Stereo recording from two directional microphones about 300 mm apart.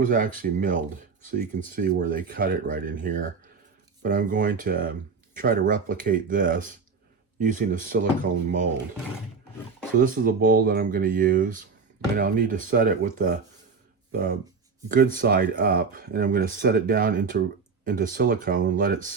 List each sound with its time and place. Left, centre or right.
0.0 s speech: right
10.0 s speech: right